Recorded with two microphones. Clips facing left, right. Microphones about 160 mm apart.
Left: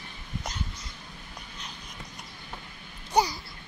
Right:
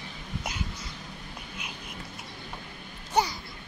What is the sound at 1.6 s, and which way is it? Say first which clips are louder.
Dog: right 1 dB; 10° right (ahead or behind).